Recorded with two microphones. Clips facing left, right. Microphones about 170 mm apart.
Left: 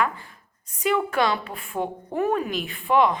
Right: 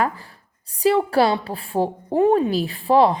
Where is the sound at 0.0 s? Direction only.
35° right (ahead or behind).